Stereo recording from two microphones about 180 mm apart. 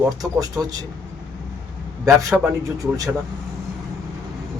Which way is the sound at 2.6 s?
20° right (ahead or behind).